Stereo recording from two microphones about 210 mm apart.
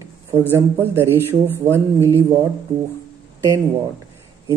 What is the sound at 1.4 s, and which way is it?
Speech, 10° left (ahead or behind).